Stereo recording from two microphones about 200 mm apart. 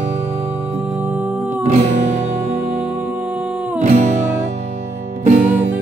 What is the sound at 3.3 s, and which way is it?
Music, 10° right (ahead or behind).